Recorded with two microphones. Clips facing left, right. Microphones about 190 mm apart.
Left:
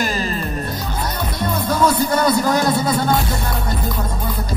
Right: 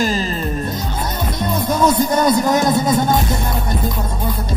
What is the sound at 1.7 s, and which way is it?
Speech, 20° right (ahead or behind).